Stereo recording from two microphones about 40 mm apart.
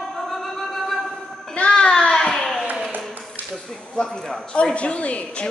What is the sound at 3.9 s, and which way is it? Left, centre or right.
Speech, centre.